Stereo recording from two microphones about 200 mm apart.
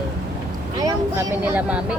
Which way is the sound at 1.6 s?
5° right (ahead or behind).